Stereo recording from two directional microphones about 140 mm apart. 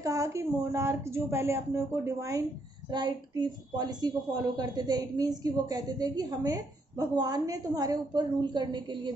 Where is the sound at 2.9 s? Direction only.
30° right (ahead or behind).